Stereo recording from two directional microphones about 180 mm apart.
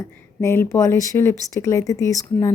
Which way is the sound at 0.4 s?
15° left (ahead or behind).